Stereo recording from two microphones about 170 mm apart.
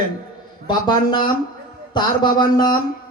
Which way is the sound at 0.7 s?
25° left (ahead or behind).